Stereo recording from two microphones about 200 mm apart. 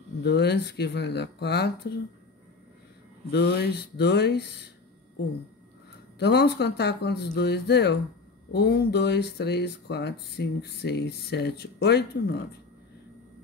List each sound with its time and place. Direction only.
0.2 s speech: 55° left (ahead or behind)
3.3 s speech: 55° left (ahead or behind)
6.1 s speech: 55° left (ahead or behind)